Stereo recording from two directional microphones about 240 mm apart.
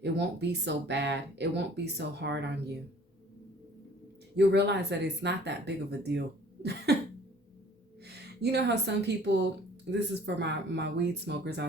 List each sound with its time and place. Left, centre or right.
0.0 s speech: right
4.4 s speech: right
8.0 s speech: right